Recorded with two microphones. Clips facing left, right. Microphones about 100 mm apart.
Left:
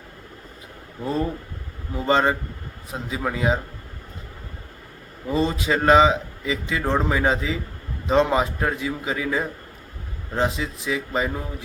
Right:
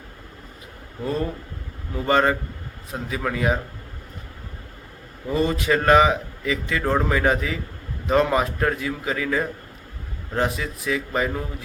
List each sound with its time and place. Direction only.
1.0 s a man's voice: 20° left (ahead or behind)
5.3 s a man's voice: 20° left (ahead or behind)